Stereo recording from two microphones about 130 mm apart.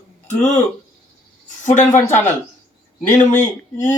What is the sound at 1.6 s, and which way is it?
Speech, 70° left (ahead or behind).